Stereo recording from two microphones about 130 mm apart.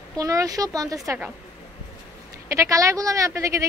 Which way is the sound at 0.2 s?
25° right (ahead or behind).